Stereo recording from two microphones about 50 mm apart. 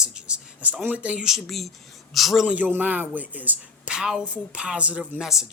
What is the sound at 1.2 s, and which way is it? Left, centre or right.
Speech, centre.